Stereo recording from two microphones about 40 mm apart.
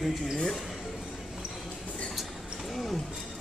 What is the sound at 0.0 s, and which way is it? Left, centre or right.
Speech, centre.